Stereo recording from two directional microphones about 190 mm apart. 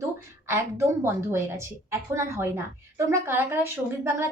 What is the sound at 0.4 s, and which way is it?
Speech, 15° right (ahead or behind).